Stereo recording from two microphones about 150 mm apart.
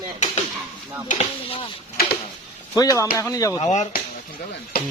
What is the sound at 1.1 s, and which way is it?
Speech, 40° left (ahead or behind).